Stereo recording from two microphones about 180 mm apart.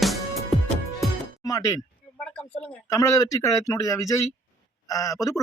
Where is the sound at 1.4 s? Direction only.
20° left (ahead or behind).